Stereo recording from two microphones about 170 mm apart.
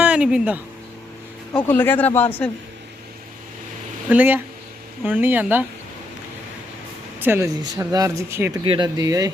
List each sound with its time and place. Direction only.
0.0 s a sound: 5° right (ahead or behind)
1.5 s speech: 10° left (ahead or behind)
4.1 s speech: 10° right (ahead or behind)
7.2 s speech: 15° right (ahead or behind)
8.6 s speech: 30° right (ahead or behind)
9.0 s speech: 20° right (ahead or behind)